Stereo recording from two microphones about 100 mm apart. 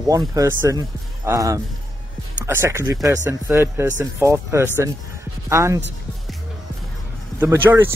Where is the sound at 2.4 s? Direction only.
25° right (ahead or behind).